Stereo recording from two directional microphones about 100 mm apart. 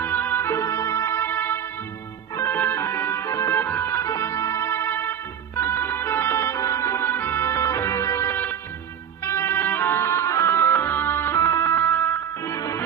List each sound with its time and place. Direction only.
0.0 s music: 20° left (ahead or behind)
3.6 s music: 20° left (ahead or behind)